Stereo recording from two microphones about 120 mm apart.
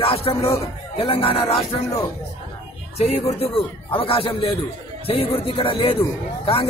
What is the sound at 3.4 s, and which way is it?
Speech, 50° left (ahead or behind).